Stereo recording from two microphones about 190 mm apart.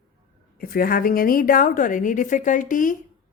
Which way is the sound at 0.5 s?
50° left (ahead or behind).